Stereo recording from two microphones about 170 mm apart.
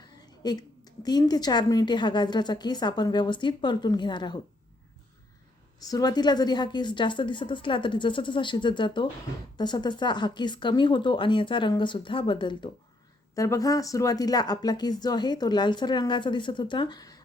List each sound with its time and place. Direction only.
0.2 s a woman's voice: 25° left (ahead or behind)
5.9 s a woman's voice: 25° left (ahead or behind)